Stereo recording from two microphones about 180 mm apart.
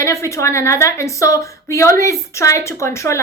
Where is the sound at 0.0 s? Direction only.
15° left (ahead or behind).